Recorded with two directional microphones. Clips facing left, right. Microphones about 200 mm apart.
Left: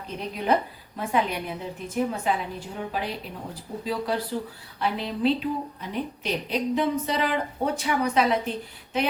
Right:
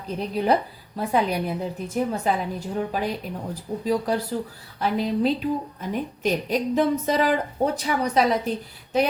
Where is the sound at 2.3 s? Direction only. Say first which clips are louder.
Right 3 dB; 40° right (ahead or behind).